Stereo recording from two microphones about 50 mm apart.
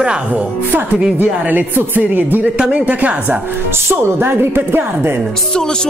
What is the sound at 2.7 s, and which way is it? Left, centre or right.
Speech, right.